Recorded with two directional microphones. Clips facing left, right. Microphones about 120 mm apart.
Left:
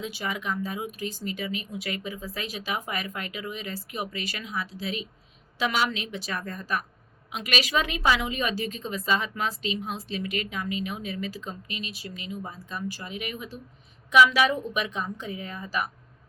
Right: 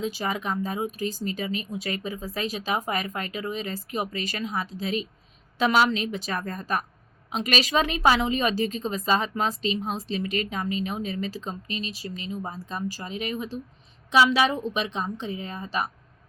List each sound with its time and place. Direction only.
0.0 s speech: 40° right (ahead or behind)